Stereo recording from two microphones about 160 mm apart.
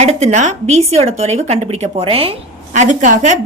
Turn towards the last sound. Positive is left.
turn(degrees=-50)  # may be behind; listen again after turning